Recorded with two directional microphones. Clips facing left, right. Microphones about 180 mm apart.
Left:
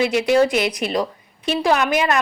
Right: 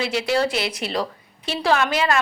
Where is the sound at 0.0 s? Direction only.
15° left (ahead or behind).